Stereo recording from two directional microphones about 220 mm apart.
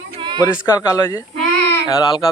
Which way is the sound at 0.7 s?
15° left (ahead or behind).